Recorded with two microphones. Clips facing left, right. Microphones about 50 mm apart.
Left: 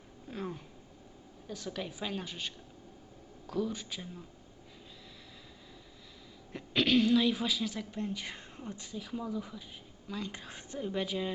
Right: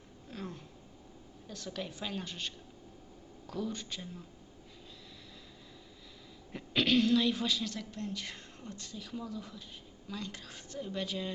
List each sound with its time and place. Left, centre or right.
0.3 s a sound: centre
1.5 s a woman's voice: centre
6.5 s a woman's voice: centre
10.3 s a woman's voice: left